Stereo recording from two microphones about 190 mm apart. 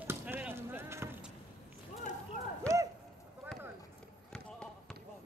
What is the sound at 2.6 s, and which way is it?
Run, 15° right (ahead or behind).